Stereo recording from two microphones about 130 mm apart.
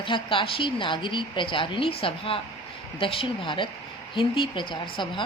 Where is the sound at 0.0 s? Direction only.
40° left (ahead or behind).